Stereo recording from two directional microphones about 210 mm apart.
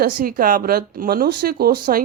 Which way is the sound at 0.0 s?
45° right (ahead or behind).